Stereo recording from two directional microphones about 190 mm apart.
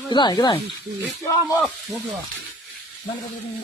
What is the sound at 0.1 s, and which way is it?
Speech, 25° left (ahead or behind).